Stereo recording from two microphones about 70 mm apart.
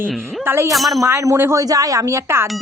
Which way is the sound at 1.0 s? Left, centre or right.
Right.